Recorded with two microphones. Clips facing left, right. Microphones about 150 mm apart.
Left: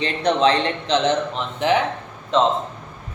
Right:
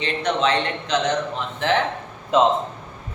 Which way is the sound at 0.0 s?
35° left (ahead or behind).